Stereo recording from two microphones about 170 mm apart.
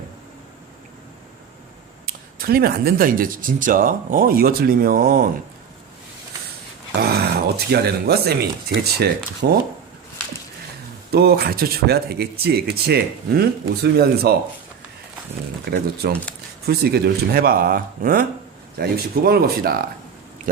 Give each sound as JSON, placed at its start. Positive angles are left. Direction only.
{"t": 2.0, "sound": "speech", "side_deg": -60}
{"t": 7.0, "sound": "speech", "side_deg": -65}
{"t": 11.1, "sound": "speech", "side_deg": -65}
{"t": 15.7, "sound": "speech", "side_deg": -75}